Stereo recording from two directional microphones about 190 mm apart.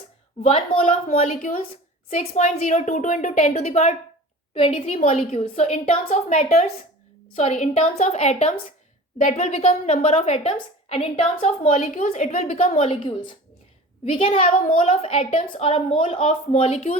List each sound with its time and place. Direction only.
0.4 s a woman's voice: 25° left (ahead or behind)
0.9 s a woman's voice: 40° left (ahead or behind)